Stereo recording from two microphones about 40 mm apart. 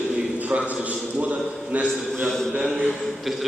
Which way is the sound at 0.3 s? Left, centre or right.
Right.